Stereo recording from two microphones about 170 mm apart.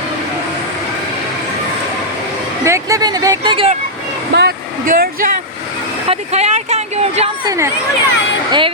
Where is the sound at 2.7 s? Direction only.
20° right (ahead or behind).